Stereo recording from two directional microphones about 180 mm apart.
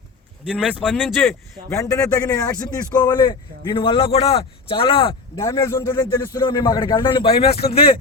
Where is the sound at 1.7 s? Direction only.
15° left (ahead or behind).